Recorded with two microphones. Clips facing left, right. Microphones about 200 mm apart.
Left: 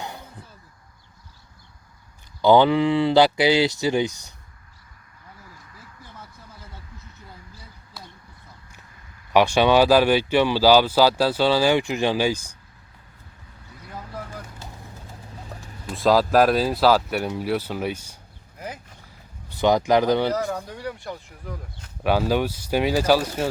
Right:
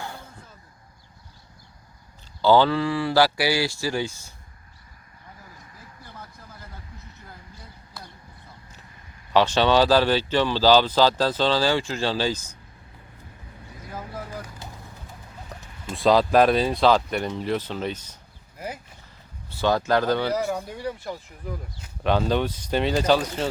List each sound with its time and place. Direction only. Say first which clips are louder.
0.0 s a sound: left 1 dB; 20° left (ahead or behind)
2.4 s speech: left 3 dB; 15° left (ahead or behind)
9.3 s speech: left 2 dB; 10° left (ahead or behind)
15.9 s speech: even; centre (ahead or behind)
19.5 s speech: left 3 dB; 15° left (ahead or behind)
20.3 s speech: even; 15° right (ahead or behind)
22.0 s speech: left 1 dB; 10° left (ahead or behind)